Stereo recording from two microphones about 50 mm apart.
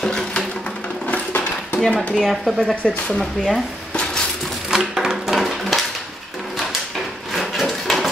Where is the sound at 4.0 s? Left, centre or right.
Centre.